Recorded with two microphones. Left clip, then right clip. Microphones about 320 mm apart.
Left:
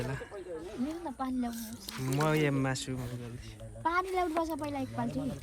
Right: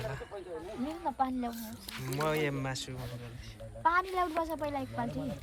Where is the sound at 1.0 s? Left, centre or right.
Centre.